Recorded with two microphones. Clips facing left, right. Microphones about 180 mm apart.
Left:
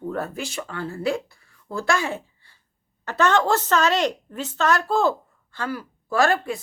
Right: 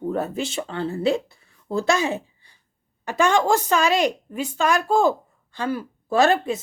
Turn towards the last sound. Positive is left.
turn(degrees=-20)  # may be behind; listen again after turning